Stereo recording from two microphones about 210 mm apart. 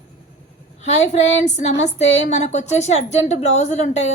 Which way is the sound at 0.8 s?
35° left (ahead or behind).